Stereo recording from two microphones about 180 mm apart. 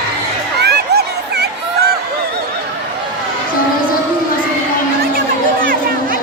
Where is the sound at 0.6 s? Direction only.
65° right (ahead or behind).